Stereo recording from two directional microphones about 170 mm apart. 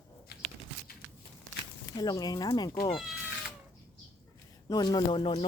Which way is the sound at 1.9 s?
25° left (ahead or behind).